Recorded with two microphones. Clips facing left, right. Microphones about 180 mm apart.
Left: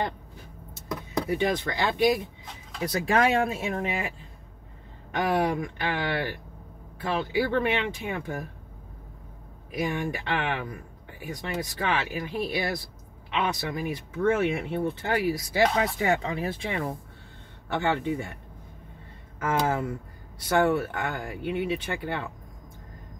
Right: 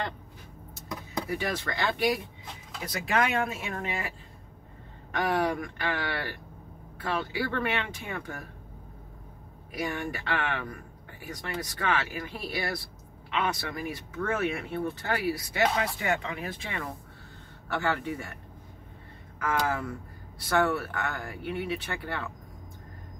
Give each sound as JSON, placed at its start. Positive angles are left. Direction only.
{"t": 1.3, "sound": "speech", "side_deg": 20}
{"t": 2.9, "sound": "speech", "side_deg": 35}
{"t": 5.3, "sound": "speech", "side_deg": 20}
{"t": 9.8, "sound": "speech", "side_deg": 20}
{"t": 19.4, "sound": "speech", "side_deg": 25}